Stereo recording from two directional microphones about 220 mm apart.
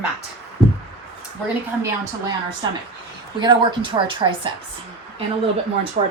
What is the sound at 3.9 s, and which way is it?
Speech, 15° right (ahead or behind).